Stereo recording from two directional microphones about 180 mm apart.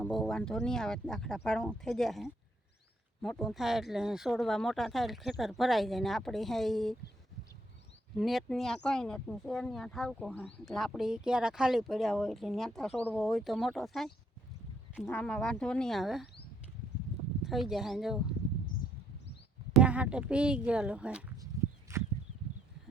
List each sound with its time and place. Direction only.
0.0 s speech: centre (ahead or behind)
8.1 s speech: centre (ahead or behind)
17.4 s speech: centre (ahead or behind)
19.7 s speech: 5° right (ahead or behind)
21.5 s walk: 15° right (ahead or behind)
21.9 s a sound: 15° right (ahead or behind)